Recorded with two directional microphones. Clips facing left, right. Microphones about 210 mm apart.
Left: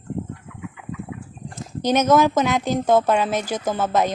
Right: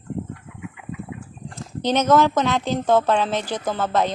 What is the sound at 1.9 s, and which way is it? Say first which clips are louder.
A woman's voice: left 1 dB; 15° left (ahead or behind).